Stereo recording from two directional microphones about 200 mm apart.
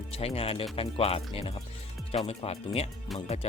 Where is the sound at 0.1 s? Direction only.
30° left (ahead or behind).